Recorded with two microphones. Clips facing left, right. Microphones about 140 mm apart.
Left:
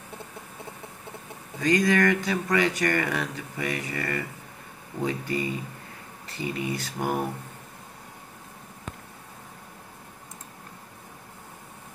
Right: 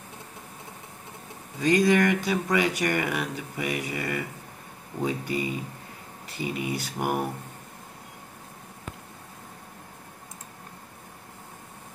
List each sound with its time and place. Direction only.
1.6 s speech: 25° right (ahead or behind)
2.0 s speech: 10° right (ahead or behind)